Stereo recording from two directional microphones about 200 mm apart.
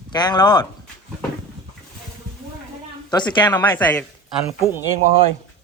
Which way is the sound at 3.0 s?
20° left (ahead or behind).